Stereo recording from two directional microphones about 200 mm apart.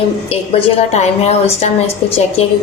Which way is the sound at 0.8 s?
35° left (ahead or behind).